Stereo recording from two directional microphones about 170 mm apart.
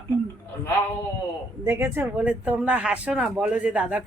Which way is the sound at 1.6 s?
10° right (ahead or behind).